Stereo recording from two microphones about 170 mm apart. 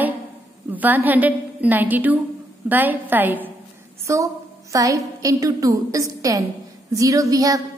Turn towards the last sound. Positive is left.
turn(degrees=-20)  # may be behind; listen again after turning